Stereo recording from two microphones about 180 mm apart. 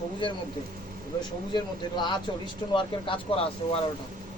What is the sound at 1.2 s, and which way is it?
Speech, 25° left (ahead or behind).